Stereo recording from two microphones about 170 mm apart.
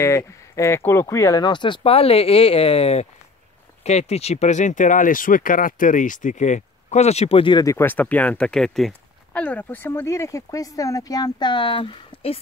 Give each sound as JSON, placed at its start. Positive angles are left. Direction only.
{"t": 0.0, "sound": "speech", "side_deg": 15}